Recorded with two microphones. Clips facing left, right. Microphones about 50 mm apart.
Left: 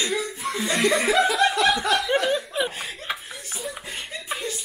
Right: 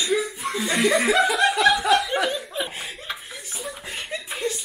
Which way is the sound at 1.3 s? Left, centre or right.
Centre.